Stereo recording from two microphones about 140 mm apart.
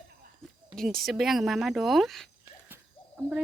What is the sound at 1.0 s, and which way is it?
Speech, centre (ahead or behind).